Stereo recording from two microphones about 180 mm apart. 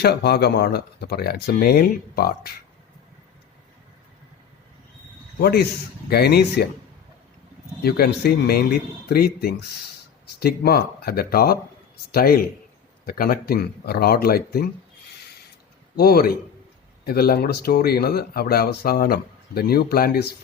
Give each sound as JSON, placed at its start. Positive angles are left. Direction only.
{"t": 0.0, "sound": "speech", "side_deg": 65}
{"t": 5.4, "sound": "speech", "side_deg": 65}
{"t": 7.8, "sound": "speech", "side_deg": 60}
{"t": 16.0, "sound": "speech", "side_deg": 60}